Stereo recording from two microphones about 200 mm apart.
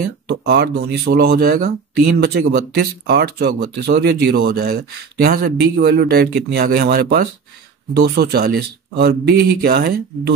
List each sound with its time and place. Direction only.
0.3 s speech: 55° right (ahead or behind)